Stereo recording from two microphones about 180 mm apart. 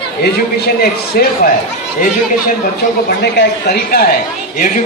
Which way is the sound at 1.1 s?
55° left (ahead or behind).